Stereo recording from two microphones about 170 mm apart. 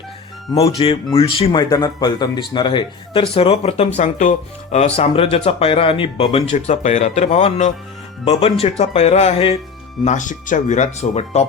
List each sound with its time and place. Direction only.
0.8 s speech: 35° left (ahead or behind)
1.7 s speech: 25° left (ahead or behind); by 11.4 s 40° left (ahead or behind)